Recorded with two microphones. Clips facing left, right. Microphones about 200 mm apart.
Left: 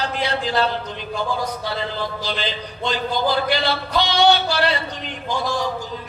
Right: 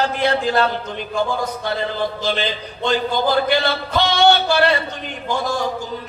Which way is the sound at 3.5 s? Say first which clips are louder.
Right 2 dB; 50° right (ahead or behind).